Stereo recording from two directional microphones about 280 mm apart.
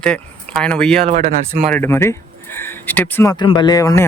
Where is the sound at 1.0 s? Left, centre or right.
Right.